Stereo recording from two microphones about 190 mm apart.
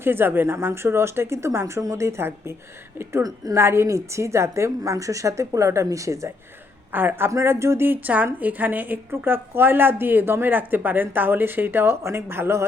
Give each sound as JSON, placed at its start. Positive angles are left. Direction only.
{"t": 0.0, "sound": "a woman's voice", "side_deg": -10}